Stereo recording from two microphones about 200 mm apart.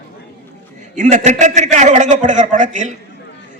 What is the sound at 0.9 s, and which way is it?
A man's voice, 35° right (ahead or behind).